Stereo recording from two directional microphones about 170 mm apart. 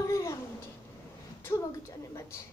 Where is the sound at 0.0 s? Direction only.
20° left (ahead or behind).